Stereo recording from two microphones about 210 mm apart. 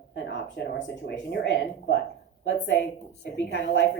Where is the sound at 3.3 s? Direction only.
60° left (ahead or behind).